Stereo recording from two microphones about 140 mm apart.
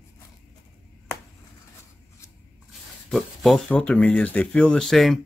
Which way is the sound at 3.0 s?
Centre (ahead or behind).